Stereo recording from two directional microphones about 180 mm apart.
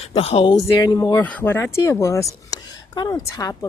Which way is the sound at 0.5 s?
20° left (ahead or behind).